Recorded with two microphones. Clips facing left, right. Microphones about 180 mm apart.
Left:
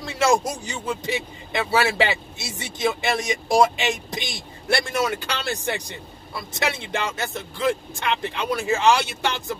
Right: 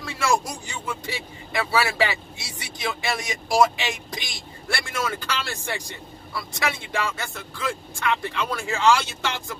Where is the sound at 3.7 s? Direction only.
20° left (ahead or behind).